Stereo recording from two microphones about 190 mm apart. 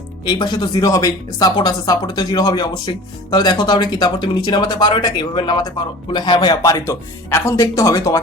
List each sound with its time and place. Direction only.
0.3 s speech: 25° left (ahead or behind)